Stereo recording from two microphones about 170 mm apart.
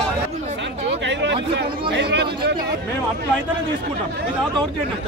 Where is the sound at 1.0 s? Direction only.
90° right.